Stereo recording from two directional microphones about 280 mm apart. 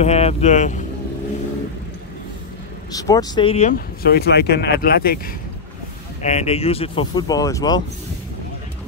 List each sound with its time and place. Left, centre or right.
0.0 s speech: left
2.9 s speech: centre; by 5.3 s left
6.2 s speech: left